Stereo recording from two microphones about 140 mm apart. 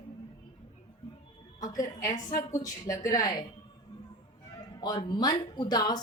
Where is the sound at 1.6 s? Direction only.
25° left (ahead or behind).